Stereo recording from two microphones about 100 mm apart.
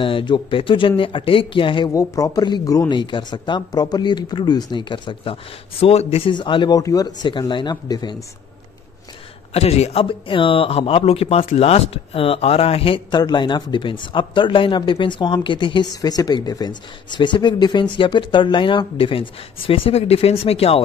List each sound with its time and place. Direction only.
0.0 s speech: 55° left (ahead or behind)
2.0 s speech: 35° left (ahead or behind)
2.9 s speech: 50° left (ahead or behind); by 6.3 s 90° left
6.3 s speech: 55° left (ahead or behind)
6.7 s speech: 35° left (ahead or behind)
9.5 s speech: 90° left; by 13.0 s 70° left (ahead or behind)
13.1 s speech: 45° left (ahead or behind); by 20.8 s 85° left